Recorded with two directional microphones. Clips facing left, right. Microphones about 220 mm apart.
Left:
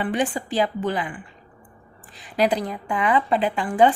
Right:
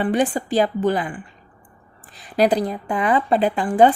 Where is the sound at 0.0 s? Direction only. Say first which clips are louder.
Right 4 dB; 40° right (ahead or behind).